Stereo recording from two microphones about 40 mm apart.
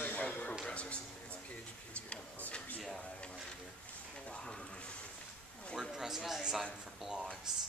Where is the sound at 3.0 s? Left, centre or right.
Left.